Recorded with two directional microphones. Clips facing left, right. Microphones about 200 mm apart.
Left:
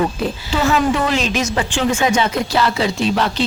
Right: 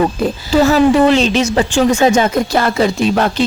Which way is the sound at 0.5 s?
40° right (ahead or behind).